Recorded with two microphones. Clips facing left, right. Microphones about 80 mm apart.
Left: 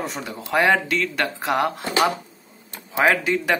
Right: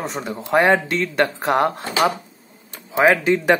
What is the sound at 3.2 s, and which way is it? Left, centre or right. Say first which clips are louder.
Speech: right 5 dB; right.